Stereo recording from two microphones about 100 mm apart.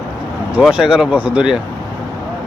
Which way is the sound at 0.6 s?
5° right (ahead or behind).